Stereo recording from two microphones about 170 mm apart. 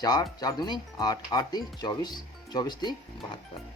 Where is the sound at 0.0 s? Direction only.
25° left (ahead or behind).